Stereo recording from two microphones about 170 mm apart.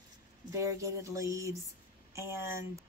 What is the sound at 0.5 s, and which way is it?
A woman's voice, 20° right (ahead or behind).